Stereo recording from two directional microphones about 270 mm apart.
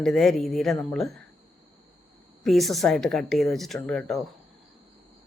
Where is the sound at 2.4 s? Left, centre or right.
Centre.